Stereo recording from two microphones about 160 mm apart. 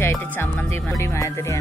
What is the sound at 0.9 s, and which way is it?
Speech, 20° left (ahead or behind).